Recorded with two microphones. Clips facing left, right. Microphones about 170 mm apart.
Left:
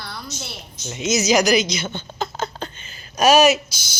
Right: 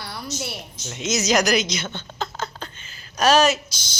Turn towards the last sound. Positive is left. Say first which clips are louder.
# left 5 dB
turn(degrees=10)  # may be behind; listen again after turning